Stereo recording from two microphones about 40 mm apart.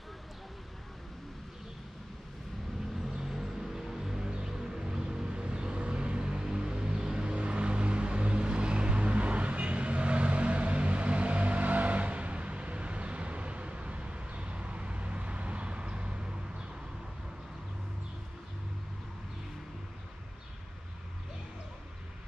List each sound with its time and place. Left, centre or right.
3.2 s music: centre
7.3 s vehicle: right